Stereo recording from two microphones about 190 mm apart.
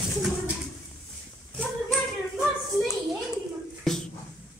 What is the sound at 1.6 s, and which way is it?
Child singing, centre (ahead or behind).